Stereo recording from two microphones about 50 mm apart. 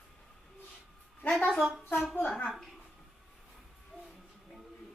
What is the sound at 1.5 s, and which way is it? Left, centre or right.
Speech, centre.